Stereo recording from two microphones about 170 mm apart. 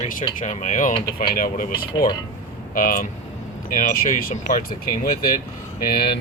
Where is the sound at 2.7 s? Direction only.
50° left (ahead or behind).